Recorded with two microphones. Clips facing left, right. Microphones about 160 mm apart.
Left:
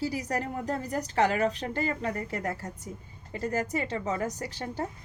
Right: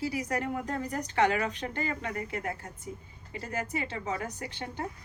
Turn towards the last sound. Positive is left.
turn(degrees=40)  # may be behind; listen again after turning